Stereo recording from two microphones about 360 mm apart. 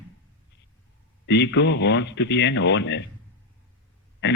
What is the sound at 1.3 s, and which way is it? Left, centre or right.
Speech, left.